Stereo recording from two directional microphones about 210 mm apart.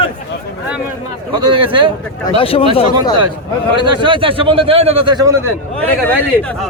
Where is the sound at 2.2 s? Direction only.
25° left (ahead or behind).